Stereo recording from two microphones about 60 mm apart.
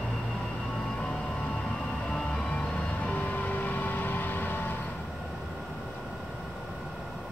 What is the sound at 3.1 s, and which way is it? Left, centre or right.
Vehicle, left.